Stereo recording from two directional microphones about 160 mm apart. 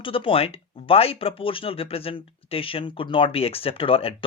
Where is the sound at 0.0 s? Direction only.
35° left (ahead or behind).